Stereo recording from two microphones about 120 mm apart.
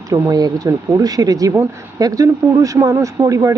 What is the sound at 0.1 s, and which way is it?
Speech, 30° right (ahead or behind).